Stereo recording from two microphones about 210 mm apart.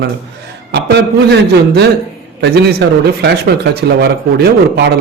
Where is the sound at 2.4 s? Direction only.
50° right (ahead or behind).